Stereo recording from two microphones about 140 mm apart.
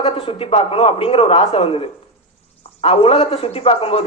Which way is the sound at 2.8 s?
45° left (ahead or behind).